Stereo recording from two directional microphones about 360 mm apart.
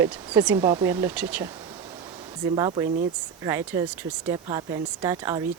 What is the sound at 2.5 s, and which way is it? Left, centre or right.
Speech, centre.